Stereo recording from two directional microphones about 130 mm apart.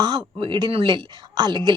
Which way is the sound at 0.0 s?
35° right (ahead or behind).